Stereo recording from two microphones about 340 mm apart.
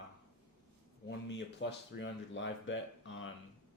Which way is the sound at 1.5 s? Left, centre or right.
Left.